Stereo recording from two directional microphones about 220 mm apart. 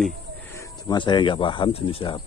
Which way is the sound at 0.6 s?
20° left (ahead or behind).